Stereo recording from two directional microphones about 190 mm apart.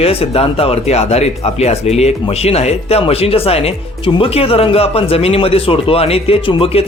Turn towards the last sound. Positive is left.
turn(degrees=30)  # may be behind; listen again after turning